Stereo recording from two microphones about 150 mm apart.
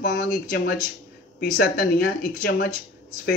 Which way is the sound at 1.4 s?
70° left (ahead or behind).